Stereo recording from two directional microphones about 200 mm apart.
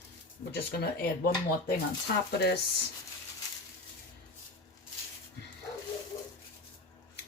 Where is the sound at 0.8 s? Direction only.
55° left (ahead or behind).